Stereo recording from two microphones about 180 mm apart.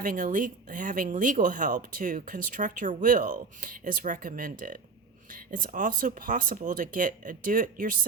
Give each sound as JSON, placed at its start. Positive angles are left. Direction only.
{"t": 0.0, "sound": "speech", "side_deg": -50}